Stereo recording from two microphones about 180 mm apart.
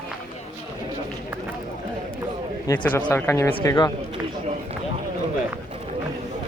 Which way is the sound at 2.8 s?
10° left (ahead or behind).